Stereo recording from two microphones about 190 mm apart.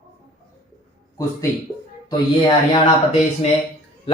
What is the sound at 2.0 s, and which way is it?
Speech, 25° left (ahead or behind).